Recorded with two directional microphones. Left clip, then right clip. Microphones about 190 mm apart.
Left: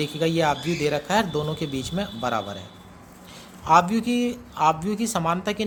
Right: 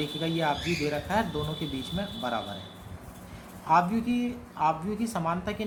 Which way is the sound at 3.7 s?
50° left (ahead or behind).